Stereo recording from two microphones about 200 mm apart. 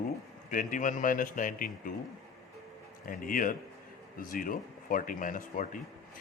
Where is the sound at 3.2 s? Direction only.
45° left (ahead or behind).